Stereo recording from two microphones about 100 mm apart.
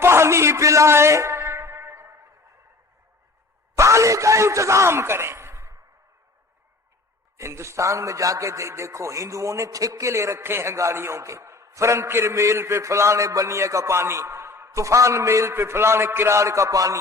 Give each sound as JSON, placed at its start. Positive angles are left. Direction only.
{"t": 0.0, "sound": "music", "side_deg": -25}
{"t": 3.8, "sound": "a man's voice", "side_deg": -30}
{"t": 7.3, "sound": "a man's voice", "side_deg": -30}